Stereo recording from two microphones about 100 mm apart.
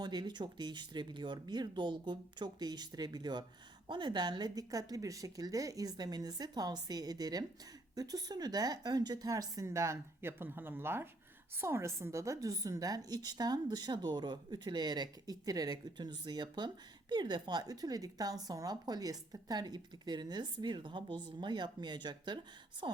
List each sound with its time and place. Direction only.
0.0 s a woman's voice: 45° right (ahead or behind)